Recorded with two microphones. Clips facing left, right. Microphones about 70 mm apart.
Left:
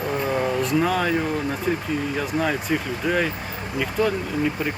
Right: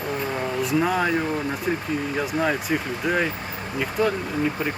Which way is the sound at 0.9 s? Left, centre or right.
Centre.